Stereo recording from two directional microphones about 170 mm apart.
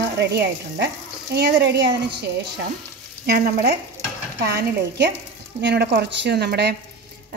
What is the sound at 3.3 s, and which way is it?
Sizzle, 70° right (ahead or behind).